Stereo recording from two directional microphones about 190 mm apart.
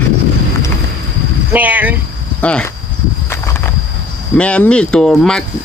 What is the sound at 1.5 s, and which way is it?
Speech, 10° right (ahead or behind).